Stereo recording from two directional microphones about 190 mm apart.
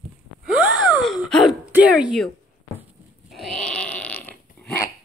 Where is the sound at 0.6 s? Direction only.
Centre (ahead or behind).